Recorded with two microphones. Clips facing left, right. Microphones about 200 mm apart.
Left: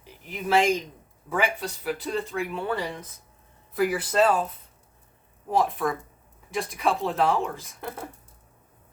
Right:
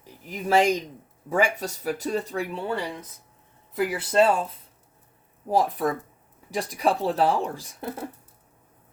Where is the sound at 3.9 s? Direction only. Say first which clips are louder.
Right 4 dB; 30° right (ahead or behind).